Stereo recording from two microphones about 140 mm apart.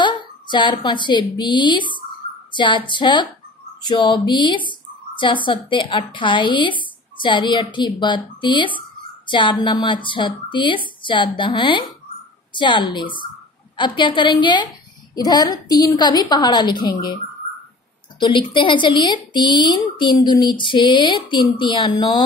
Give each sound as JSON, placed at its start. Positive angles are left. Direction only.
{"t": 0.0, "sound": "a woman's voice", "side_deg": 35}
{"t": 18.2, "sound": "speech", "side_deg": 35}